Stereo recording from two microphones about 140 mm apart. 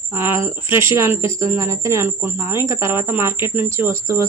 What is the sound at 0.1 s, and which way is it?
Speech, 20° right (ahead or behind).